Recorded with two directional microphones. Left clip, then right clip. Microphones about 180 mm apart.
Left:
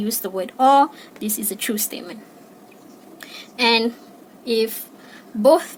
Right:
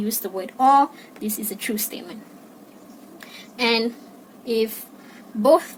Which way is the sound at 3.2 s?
30° left (ahead or behind).